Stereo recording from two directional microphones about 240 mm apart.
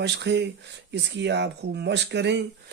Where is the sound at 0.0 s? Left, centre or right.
Right.